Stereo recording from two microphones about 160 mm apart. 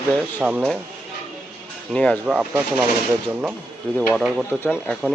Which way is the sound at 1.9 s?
5° left (ahead or behind).